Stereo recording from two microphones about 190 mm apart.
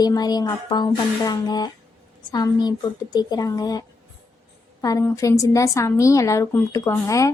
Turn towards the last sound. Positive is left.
turn(degrees=15)  # may be behind; listen again after turning